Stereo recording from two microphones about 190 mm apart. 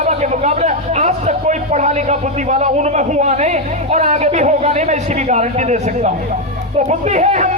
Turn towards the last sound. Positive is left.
turn(degrees=-35)  # may be behind; listen again after turning